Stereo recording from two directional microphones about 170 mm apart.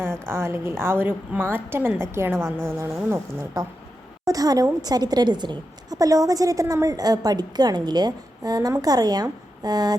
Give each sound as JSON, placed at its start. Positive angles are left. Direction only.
{"t": 0.0, "sound": "a woman's voice", "side_deg": -15}